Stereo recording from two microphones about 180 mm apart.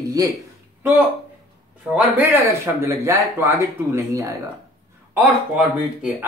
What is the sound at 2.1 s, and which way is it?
Speech, 10° right (ahead or behind).